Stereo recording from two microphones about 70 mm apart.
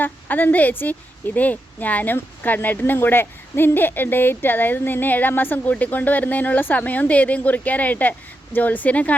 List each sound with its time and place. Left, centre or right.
0.0 s a woman's voice: left